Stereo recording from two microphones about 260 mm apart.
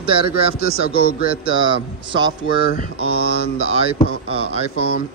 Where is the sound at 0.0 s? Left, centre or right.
Right.